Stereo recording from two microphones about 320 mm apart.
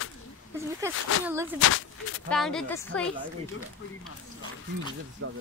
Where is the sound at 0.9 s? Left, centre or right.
Left.